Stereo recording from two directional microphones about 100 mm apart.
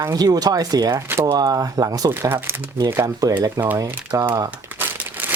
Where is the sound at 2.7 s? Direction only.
35° right (ahead or behind).